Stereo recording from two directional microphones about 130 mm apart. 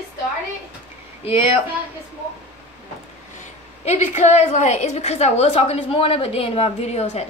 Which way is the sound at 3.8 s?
60° left (ahead or behind).